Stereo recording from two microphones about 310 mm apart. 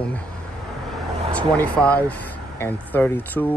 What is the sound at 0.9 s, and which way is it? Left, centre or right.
Vehicle, centre.